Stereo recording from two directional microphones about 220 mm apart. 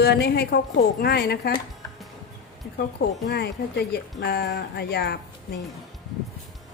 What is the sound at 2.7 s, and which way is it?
Music, 45° left (ahead or behind).